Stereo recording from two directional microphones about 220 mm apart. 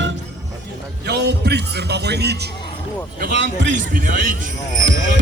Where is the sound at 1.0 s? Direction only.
50° right (ahead or behind).